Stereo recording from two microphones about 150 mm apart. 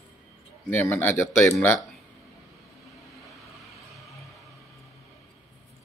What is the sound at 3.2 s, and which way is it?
Music, centre (ahead or behind).